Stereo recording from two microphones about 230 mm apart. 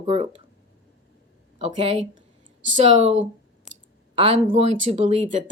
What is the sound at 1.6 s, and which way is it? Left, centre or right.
Speech, right.